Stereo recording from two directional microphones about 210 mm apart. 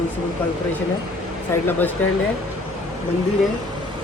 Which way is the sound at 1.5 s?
10° left (ahead or behind).